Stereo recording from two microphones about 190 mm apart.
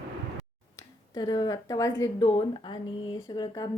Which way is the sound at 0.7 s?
20° left (ahead or behind).